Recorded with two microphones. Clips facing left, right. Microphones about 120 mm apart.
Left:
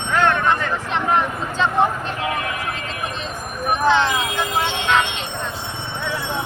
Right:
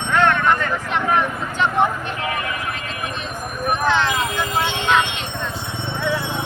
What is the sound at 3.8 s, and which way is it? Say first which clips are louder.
Speech: left 3 dB; 20° left (ahead or behind).